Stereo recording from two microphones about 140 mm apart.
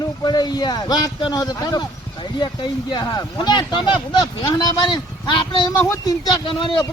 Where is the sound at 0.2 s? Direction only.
30° left (ahead or behind).